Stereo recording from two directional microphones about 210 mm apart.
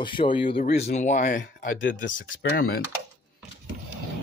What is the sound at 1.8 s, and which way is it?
Speech, 60° left (ahead or behind).